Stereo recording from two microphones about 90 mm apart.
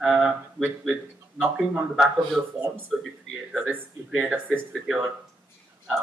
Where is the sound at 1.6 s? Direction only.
5° right (ahead or behind).